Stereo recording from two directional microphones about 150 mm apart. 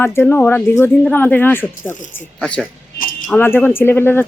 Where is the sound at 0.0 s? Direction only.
15° left (ahead or behind).